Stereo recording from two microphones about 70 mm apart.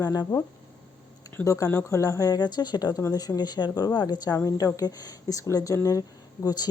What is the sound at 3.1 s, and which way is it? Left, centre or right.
A woman's voice, left.